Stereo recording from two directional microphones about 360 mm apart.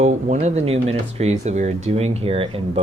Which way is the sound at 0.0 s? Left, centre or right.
Centre.